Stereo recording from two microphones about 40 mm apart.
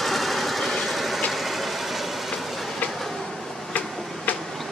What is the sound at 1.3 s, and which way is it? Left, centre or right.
Vehicle, centre.